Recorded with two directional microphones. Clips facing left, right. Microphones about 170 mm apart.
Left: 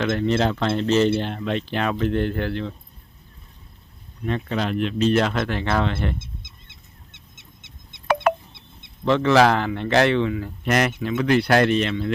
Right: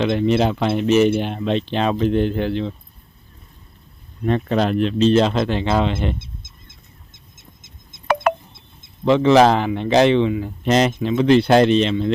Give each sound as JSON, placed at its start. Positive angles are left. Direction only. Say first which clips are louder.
{"t": 0.0, "sound": "speech", "louder": "right 4 dB", "side_deg": -15}
{"t": 4.3, "sound": "speech", "louder": "right 6 dB", "side_deg": -40}
{"t": 6.1, "sound": "bird", "louder": "right 1 dB", "side_deg": 50}
{"t": 6.7, "sound": "a sound", "louder": "right 2 dB", "side_deg": 70}
{"t": 9.0, "sound": "speech", "louder": "right 4 dB", "side_deg": -15}